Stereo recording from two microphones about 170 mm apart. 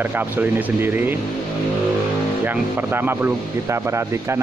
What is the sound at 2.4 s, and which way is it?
A man's voice, 10° right (ahead or behind).